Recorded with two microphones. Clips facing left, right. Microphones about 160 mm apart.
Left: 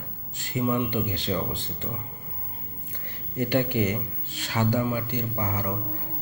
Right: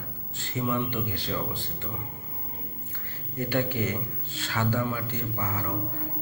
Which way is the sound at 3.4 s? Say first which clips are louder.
Left 3 dB; 15° left (ahead or behind).